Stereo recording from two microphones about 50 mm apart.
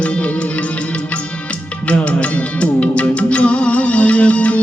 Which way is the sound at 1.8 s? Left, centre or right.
Left.